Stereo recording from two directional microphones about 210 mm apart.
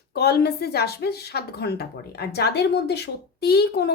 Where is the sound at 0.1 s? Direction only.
50° left (ahead or behind).